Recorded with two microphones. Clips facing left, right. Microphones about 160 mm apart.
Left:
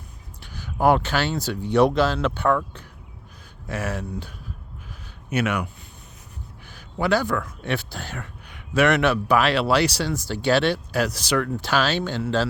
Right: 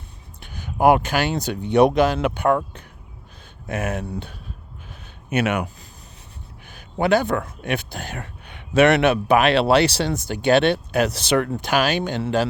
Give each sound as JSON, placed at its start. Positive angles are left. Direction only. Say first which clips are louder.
{"t": 0.4, "sound": "speech", "louder": "right 3 dB", "side_deg": -20}
{"t": 3.8, "sound": "speech", "louder": "right 3 dB", "side_deg": -20}
{"t": 4.0, "sound": "speech", "louder": "right 2 dB", "side_deg": -30}
{"t": 6.7, "sound": "speech", "louder": "right 3 dB", "side_deg": -20}